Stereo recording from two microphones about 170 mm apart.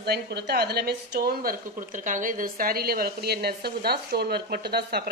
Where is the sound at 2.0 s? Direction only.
50° right (ahead or behind).